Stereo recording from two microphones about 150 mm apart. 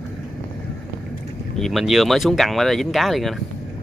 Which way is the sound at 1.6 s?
Centre (ahead or behind).